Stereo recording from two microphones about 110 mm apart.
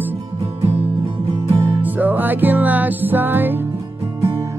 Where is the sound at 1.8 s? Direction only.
15° right (ahead or behind).